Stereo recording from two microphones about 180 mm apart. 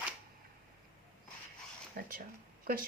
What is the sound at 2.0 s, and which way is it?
Speech, 55° right (ahead or behind).